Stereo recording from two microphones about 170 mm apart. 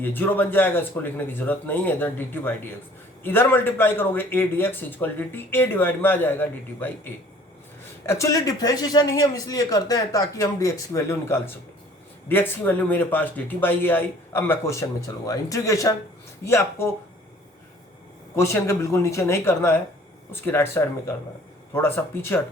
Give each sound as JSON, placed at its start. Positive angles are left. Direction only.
{"t": 0.0, "sound": "a man's voice", "side_deg": 10}
{"t": 18.3, "sound": "a man's voice", "side_deg": 15}